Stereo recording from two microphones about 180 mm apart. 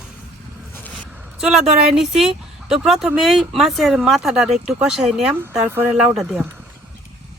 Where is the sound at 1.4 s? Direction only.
5° right (ahead or behind).